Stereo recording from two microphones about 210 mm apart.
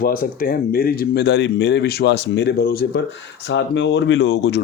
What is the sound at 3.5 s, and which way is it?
Speech, 60° left (ahead or behind).